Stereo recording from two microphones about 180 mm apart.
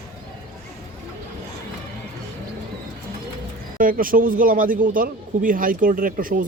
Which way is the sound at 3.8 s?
50° right (ahead or behind).